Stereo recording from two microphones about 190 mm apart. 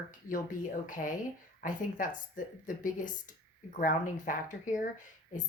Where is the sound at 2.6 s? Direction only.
45° left (ahead or behind).